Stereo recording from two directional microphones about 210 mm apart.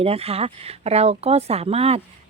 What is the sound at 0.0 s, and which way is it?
A woman's voice, 30° right (ahead or behind).